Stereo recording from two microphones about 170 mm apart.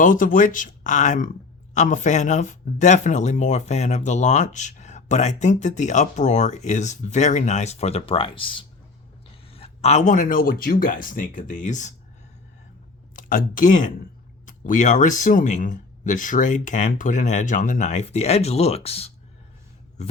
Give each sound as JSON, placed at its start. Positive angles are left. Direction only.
{"t": 0.0, "sound": "speech", "side_deg": 50}
{"t": 13.1, "sound": "speech", "side_deg": 55}